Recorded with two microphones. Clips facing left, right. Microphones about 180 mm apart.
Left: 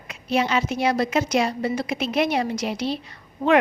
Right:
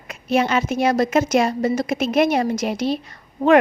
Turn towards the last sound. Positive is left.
turn(degrees=-45)  # may be behind; listen again after turning